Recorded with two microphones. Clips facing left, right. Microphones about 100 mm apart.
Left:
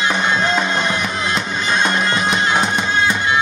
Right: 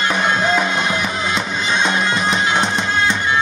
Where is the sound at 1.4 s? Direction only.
Centre (ahead or behind).